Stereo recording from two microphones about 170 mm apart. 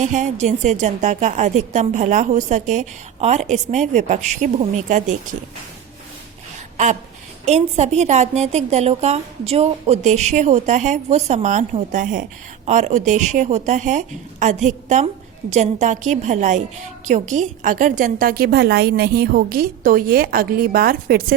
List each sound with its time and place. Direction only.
0.0 s a woman's voice: 45° right (ahead or behind)
7.4 s a woman's voice: 40° right (ahead or behind); by 21.3 s 60° right (ahead or behind)